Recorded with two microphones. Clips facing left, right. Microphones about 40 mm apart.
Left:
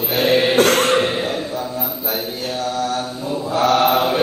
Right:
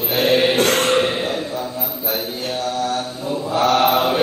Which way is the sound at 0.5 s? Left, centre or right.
Left.